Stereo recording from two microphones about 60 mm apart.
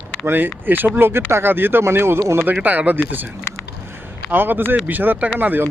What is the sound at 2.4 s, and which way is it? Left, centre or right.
Speech, right.